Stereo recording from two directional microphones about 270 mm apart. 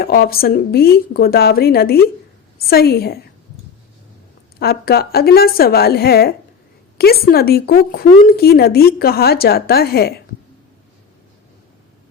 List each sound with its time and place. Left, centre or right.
0.0 s speech: left
4.6 s speech: left